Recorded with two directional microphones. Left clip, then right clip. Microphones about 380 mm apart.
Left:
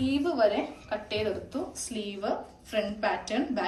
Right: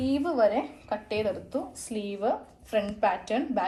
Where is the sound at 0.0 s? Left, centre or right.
Centre.